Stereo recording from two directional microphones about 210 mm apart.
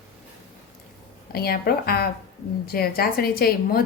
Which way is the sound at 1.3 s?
45° left (ahead or behind).